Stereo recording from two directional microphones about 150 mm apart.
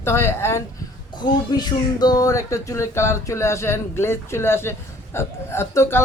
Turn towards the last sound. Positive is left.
turn(degrees=15)  # may be behind; listen again after turning